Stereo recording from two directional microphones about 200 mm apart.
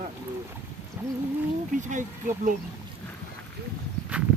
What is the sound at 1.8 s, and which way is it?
Speech, 40° right (ahead or behind).